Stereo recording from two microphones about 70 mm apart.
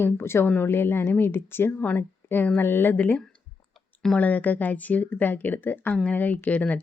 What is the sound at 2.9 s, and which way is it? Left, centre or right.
Speech, left.